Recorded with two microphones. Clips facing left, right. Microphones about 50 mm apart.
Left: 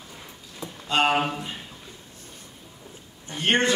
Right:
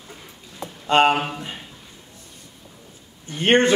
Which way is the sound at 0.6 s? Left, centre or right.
Right.